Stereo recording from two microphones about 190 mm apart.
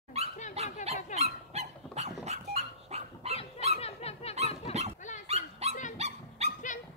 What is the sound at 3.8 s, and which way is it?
Snicker, 35° left (ahead or behind).